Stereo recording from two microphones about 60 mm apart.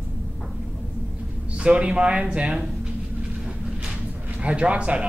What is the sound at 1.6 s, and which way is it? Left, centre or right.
Speech, centre.